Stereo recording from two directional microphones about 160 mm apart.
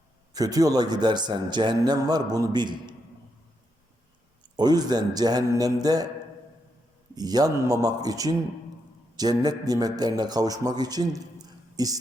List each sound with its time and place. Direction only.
0.3 s a man's voice: 20° right (ahead or behind)
4.5 s a man's voice: 25° right (ahead or behind)
7.2 s a man's voice: 25° right (ahead or behind)